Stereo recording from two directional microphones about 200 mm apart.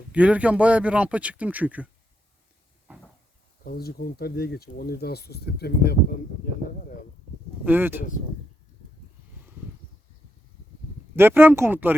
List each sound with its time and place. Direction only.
0.1 s speech: 5° right (ahead or behind)
3.6 s speech: 50° left (ahead or behind)
6.4 s a sound: 45° left (ahead or behind)
7.6 s speech: 10° right (ahead or behind)
11.2 s speech: 10° right (ahead or behind)